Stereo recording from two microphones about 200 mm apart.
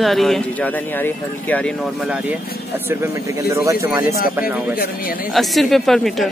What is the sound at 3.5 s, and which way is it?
Speech, 15° right (ahead or behind).